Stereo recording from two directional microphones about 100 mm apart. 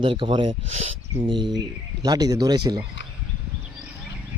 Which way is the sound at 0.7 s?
90° right.